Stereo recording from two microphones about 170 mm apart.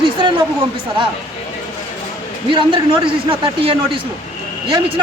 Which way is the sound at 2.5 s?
30° right (ahead or behind).